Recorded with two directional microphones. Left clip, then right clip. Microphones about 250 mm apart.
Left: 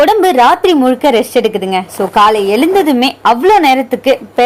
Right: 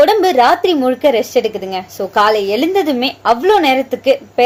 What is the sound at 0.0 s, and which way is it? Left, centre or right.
Speech, centre.